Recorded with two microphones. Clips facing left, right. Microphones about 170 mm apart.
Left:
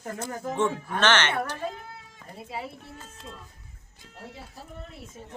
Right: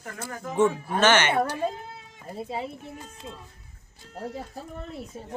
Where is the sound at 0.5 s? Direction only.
10° right (ahead or behind).